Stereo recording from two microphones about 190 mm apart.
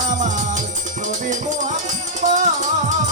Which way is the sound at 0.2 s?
40° right (ahead or behind).